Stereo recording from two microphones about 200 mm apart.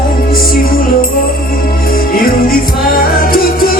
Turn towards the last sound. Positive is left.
turn(degrees=45)  # may be behind; listen again after turning